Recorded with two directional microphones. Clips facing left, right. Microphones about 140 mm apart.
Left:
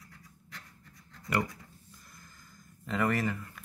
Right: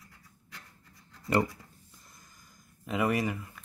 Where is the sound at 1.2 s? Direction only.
25° right (ahead or behind).